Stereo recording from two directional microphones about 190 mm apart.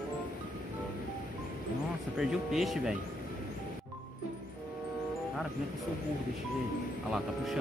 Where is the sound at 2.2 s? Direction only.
5° right (ahead or behind).